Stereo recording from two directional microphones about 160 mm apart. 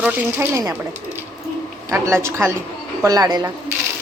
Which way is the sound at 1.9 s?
15° right (ahead or behind).